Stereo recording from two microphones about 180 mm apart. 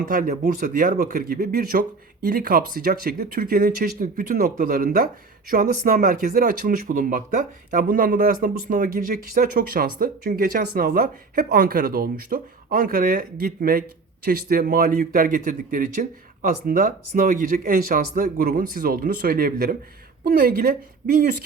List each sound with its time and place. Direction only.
0.1 s speech: 50° right (ahead or behind)